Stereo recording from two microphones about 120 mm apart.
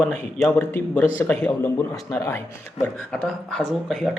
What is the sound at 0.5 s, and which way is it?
Speech, 15° left (ahead or behind).